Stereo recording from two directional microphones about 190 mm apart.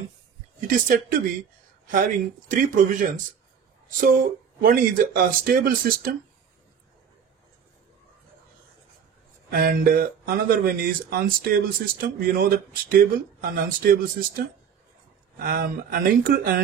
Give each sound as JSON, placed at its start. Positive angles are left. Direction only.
{"t": 0.6, "sound": "speech", "side_deg": -45}
{"t": 9.5, "sound": "speech", "side_deg": -50}
{"t": 15.4, "sound": "speech", "side_deg": -50}